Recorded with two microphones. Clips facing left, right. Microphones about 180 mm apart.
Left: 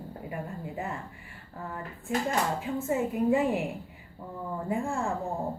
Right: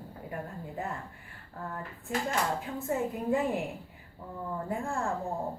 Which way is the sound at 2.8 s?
5° left (ahead or behind).